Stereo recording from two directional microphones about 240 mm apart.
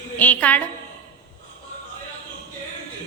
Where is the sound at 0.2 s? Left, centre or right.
Centre.